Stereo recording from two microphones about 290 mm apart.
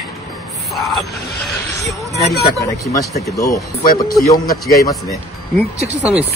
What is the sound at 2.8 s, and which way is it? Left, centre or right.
Speech, centre.